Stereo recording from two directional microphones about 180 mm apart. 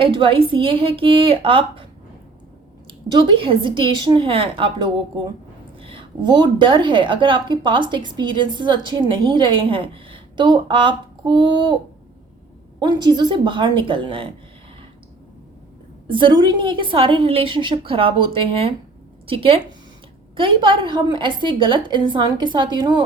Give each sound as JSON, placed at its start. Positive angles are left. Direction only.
{"t": 0.0, "sound": "a woman's voice", "side_deg": -30}
{"t": 3.1, "sound": "a woman's voice", "side_deg": -25}
{"t": 12.8, "sound": "a woman's voice", "side_deg": -25}
{"t": 16.0, "sound": "a woman's voice", "side_deg": -25}